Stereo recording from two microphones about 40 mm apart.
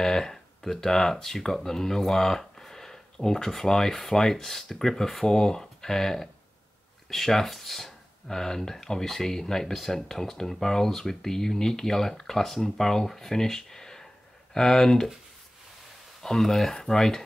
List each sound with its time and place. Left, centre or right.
0.0 s speech: centre
16.2 s speech: centre